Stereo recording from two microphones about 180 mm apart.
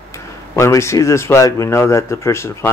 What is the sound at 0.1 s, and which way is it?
Speech, 15° left (ahead or behind).